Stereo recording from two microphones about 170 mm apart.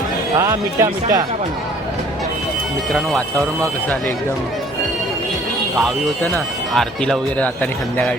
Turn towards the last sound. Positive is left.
turn(degrees=5)  # may be behind; listen again after turning